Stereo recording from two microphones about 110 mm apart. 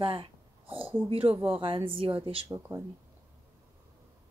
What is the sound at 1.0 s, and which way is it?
Speech, 55° right (ahead or behind).